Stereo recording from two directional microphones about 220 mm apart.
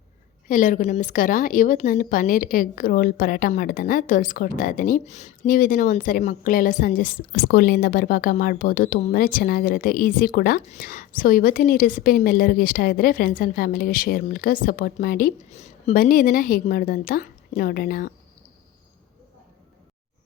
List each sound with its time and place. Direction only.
0.4 s a woman's voice: 35° left (ahead or behind)